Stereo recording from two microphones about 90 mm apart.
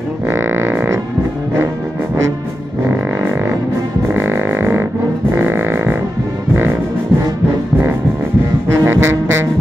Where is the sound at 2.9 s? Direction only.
25° right (ahead or behind).